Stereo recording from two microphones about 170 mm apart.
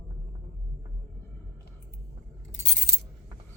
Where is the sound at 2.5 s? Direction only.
90° left.